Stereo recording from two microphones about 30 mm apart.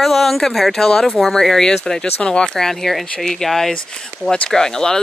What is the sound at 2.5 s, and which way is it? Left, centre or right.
Speech, centre.